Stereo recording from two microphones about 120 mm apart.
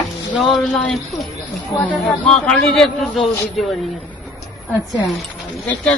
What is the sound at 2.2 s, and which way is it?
A man's voice, 10° left (ahead or behind).